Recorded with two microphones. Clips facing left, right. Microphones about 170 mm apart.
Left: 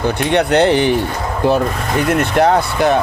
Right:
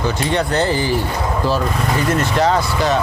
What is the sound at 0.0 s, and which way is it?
Speech, 60° left (ahead or behind).